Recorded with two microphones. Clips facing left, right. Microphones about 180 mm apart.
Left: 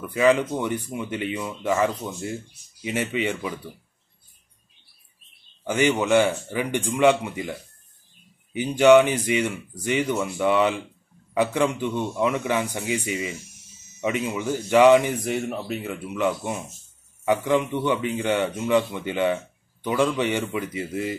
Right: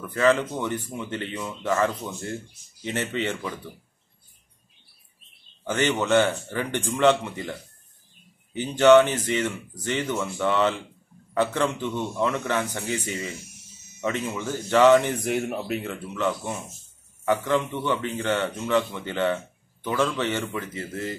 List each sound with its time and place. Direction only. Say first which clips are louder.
0.0 s a man's voice: left 2 dB; 15° left (ahead or behind)
5.7 s a man's voice: left 2 dB; 10° left (ahead or behind)
8.5 s a man's voice: left 1 dB; 10° left (ahead or behind)
15.1 s a man's voice: even; centre (ahead or behind)